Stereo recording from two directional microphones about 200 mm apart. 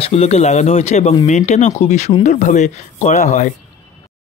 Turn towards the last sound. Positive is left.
turn(degrees=40)  # may be behind; listen again after turning